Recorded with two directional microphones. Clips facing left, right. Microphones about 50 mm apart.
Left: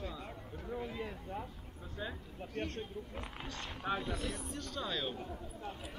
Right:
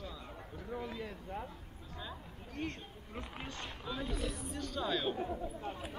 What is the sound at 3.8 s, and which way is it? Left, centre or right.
Speech, left.